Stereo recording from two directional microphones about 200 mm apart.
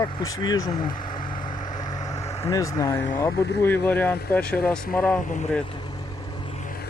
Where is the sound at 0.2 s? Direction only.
20° left (ahead or behind).